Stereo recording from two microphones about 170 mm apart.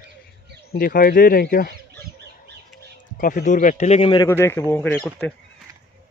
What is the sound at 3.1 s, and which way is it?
Speech, 55° left (ahead or behind).